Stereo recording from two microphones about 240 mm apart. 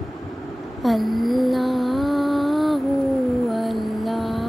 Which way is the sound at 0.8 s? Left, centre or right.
Centre.